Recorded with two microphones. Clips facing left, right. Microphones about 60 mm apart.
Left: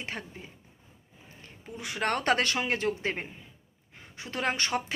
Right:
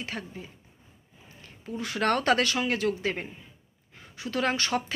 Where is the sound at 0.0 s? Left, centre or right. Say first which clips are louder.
Right 2 dB; left.